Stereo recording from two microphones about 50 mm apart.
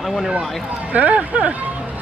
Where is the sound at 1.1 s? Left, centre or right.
Right.